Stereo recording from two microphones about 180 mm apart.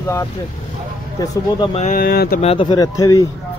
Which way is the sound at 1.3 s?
25° left (ahead or behind).